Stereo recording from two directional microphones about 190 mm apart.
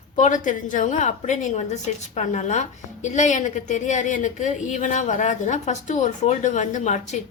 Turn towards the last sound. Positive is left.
turn(degrees=40)  # may be behind; listen again after turning